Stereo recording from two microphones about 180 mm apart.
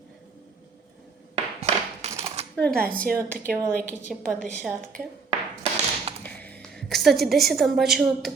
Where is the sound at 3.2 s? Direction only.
15° right (ahead or behind).